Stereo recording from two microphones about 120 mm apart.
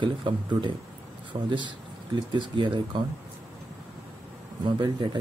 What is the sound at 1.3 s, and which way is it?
Speech, 60° right (ahead or behind).